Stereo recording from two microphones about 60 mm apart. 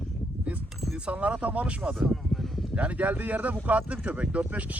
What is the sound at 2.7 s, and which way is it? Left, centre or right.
Speech, right.